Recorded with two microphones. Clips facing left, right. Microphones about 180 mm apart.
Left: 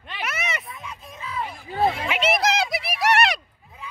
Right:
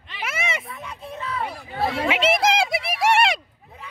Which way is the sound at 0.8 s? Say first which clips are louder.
Right 4 dB; 65° right (ahead or behind).